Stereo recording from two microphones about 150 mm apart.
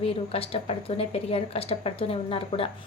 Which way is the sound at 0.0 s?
40° left (ahead or behind).